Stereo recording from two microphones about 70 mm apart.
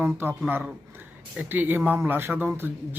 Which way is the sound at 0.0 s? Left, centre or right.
Right.